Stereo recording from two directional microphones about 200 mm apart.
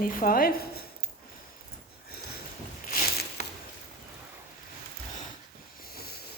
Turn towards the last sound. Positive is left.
turn(degrees=50)  # may be behind; listen again after turning